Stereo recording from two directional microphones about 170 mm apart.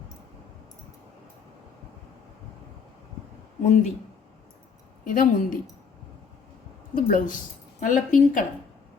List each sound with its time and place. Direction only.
3.6 s speech: 45° left (ahead or behind)
5.0 s speech: 50° left (ahead or behind)
6.9 s speech: 50° left (ahead or behind)